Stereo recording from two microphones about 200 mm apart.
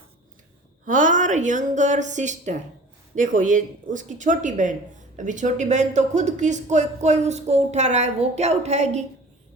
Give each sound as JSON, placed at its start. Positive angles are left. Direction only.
{"t": 0.9, "sound": "speech", "side_deg": -40}